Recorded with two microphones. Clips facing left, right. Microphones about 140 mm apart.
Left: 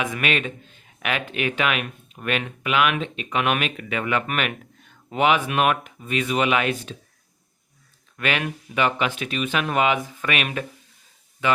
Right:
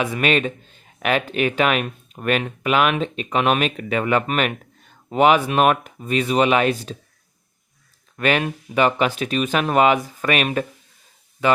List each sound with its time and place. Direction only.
0.0 s speech: 35° right (ahead or behind)
8.1 s speech: 40° right (ahead or behind)